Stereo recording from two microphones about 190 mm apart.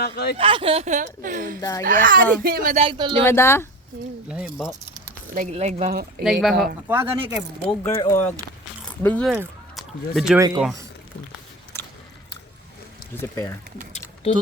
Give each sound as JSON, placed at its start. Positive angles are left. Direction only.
{"t": 0.0, "sound": "speech", "side_deg": 55}
{"t": 0.3, "sound": "speech", "side_deg": -30}
{"t": 2.8, "sound": "speech", "side_deg": -25}
{"t": 3.2, "sound": "speech", "side_deg": 15}
{"t": 4.3, "sound": "speech", "side_deg": -5}
{"t": 5.3, "sound": "speech", "side_deg": -40}
{"t": 5.9, "sound": "speech", "side_deg": -55}
{"t": 6.2, "sound": "speech", "side_deg": 0}
{"t": 6.8, "sound": "speech", "side_deg": -15}
{"t": 7.7, "sound": "speech", "side_deg": 20}
{"t": 9.3, "sound": "speech", "side_deg": -5}
{"t": 10.3, "sound": "speech", "side_deg": -20}
{"t": 13.1, "sound": "speech", "side_deg": 20}